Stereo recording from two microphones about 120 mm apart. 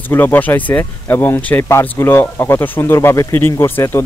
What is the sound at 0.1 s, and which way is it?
Speech, 15° left (ahead or behind).